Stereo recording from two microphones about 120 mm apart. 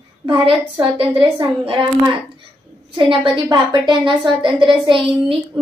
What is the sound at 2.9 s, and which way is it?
Child singing, 45° right (ahead or behind).